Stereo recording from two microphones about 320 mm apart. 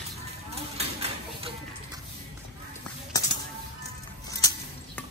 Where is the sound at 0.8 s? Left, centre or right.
Centre.